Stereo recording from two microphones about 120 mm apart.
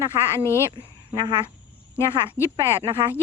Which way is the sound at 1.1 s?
35° right (ahead or behind).